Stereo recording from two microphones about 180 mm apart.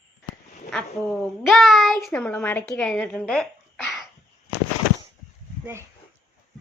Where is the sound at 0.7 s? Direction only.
Centre (ahead or behind).